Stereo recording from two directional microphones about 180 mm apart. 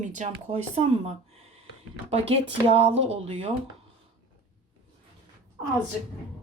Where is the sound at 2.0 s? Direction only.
35° right (ahead or behind).